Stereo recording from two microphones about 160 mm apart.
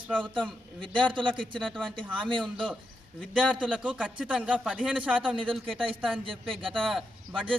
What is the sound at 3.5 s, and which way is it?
A man's voice, 5° right (ahead or behind).